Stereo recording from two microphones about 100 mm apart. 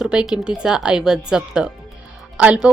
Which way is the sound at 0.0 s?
5° right (ahead or behind).